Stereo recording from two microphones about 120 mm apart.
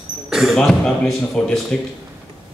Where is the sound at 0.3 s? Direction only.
Centre (ahead or behind).